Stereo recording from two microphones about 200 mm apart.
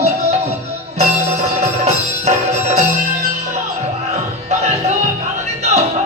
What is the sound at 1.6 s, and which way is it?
Music, 35° right (ahead or behind).